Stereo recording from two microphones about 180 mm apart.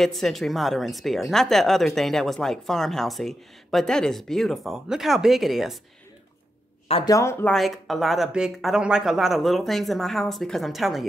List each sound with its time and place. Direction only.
0.0 s a woman's voice: centre (ahead or behind)
7.1 s speech: 15° left (ahead or behind)
7.5 s a woman's voice: centre (ahead or behind)